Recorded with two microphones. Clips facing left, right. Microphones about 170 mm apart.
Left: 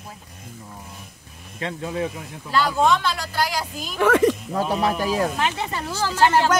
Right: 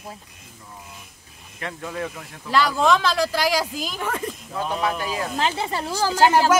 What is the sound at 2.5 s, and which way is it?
Speech, 90° right.